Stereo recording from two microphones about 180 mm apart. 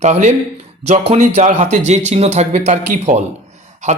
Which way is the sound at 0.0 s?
40° right (ahead or behind).